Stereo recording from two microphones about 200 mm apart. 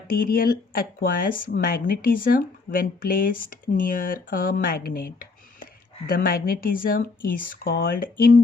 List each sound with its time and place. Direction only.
0.1 s speech: 45° left (ahead or behind)